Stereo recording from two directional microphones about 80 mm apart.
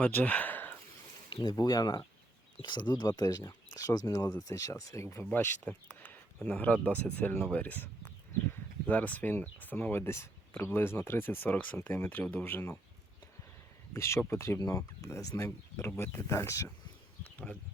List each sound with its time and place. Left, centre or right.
0.0 s speech: left
1.3 s speech: left
1.5 s speech: left
2.6 s speech: left
5.6 s speech: centre
8.9 s speech: centre
13.9 s speech: left
17.2 s a sound: left